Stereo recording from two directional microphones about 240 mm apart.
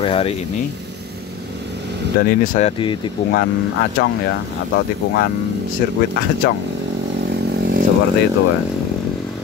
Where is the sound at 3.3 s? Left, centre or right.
Left.